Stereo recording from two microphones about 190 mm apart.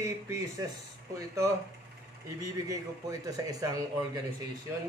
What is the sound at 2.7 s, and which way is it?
A man's voice, 20° right (ahead or behind).